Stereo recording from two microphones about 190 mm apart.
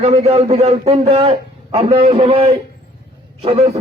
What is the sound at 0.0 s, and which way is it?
A man's voice, 35° right (ahead or behind).